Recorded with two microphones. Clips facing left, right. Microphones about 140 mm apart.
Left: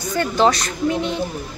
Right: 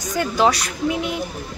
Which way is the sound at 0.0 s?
10° right (ahead or behind).